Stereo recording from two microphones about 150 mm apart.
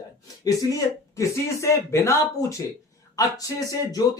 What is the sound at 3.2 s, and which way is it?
Speech, 25° left (ahead or behind).